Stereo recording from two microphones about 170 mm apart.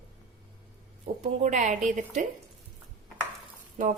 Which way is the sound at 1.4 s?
45° right (ahead or behind).